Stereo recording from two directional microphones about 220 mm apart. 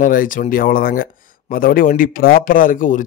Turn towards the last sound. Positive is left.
turn(degrees=35)  # may be behind; listen again after turning